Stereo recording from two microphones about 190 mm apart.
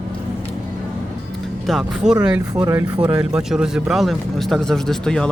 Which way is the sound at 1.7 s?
Centre (ahead or behind).